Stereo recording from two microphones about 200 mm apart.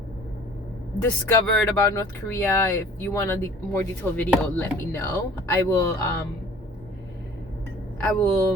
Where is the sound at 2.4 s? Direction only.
10° left (ahead or behind).